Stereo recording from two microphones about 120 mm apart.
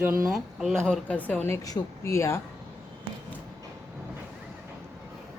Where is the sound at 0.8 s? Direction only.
10° left (ahead or behind).